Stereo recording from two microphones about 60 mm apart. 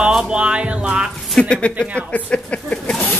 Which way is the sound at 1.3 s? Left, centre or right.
Centre.